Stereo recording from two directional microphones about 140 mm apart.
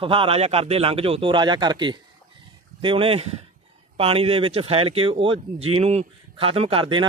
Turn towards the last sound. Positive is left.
turn(degrees=-40)  # may be behind; listen again after turning